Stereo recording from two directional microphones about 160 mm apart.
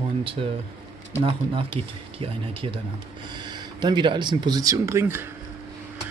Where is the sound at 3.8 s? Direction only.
30° right (ahead or behind).